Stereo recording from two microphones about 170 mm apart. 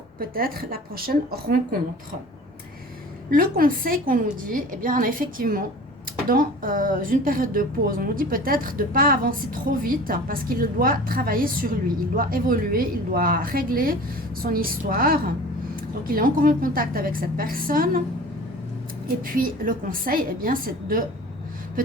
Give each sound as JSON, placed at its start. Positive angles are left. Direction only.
{"t": 0.2, "sound": "a woman's voice", "side_deg": -60}
{"t": 3.2, "sound": "a woman's voice", "side_deg": -55}
{"t": 19.2, "sound": "a woman's voice", "side_deg": -55}